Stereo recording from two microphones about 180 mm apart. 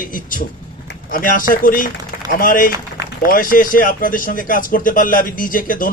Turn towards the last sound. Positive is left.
turn(degrees=50)  # may be behind; listen again after turning